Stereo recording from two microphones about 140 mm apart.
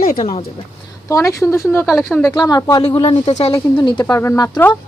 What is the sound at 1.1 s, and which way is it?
Speech, 25° left (ahead or behind).